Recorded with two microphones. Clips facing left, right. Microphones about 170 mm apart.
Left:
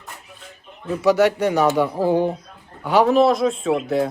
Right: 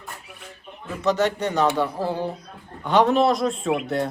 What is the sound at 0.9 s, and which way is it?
Speech, 10° left (ahead or behind).